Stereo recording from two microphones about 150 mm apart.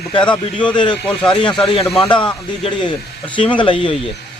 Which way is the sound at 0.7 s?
30° left (ahead or behind).